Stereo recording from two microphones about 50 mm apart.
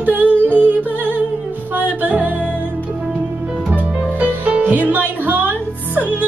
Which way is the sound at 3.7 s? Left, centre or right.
Right.